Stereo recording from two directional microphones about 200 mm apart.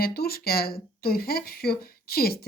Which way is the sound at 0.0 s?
50° left (ahead or behind).